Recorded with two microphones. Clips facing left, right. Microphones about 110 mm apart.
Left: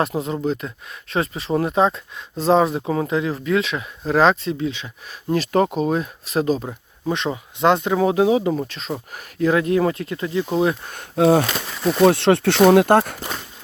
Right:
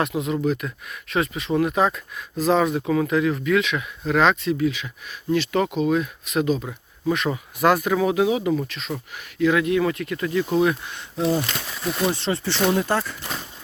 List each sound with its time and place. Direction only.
0.0 s speech: 35° left (ahead or behind)
5.3 s speech: 40° left (ahead or behind)
10.8 s speech: 50° left (ahead or behind)
11.8 s speech: 10° left (ahead or behind)
12.0 s speech: 70° left (ahead or behind)